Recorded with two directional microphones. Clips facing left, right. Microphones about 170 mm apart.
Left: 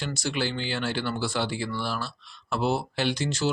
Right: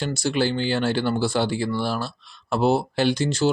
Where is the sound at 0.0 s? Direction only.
35° right (ahead or behind).